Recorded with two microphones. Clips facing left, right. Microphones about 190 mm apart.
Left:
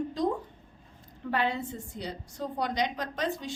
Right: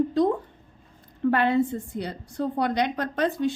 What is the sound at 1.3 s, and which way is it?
A woman's voice, 60° right (ahead or behind).